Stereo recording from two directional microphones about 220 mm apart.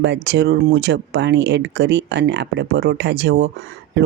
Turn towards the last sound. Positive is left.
turn(degrees=-50)  # may be behind; listen again after turning